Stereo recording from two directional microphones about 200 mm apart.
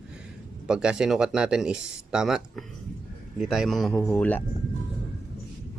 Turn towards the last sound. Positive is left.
turn(degrees=10)  # may be behind; listen again after turning